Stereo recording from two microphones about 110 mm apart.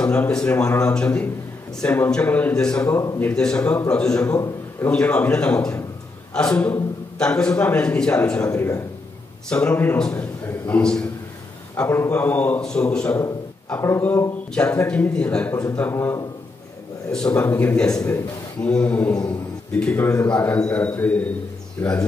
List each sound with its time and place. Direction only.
0.0 s a man's voice: 10° left (ahead or behind)
4.4 s a man's voice: 25° left (ahead or behind)
4.9 s a man's voice: 10° left (ahead or behind)
8.5 s a man's voice: 25° left (ahead or behind)
9.5 s a man's voice: 10° left (ahead or behind)
11.7 s a man's voice: 20° left (ahead or behind)
13.7 s a man's voice: 25° left (ahead or behind)
14.5 s a man's voice: 15° left (ahead or behind)
15.9 s a man's voice: 20° left (ahead or behind)
17.1 s a man's voice: 10° left (ahead or behind); by 18.2 s 25° left (ahead or behind)
18.6 s a man's voice: 10° left (ahead or behind)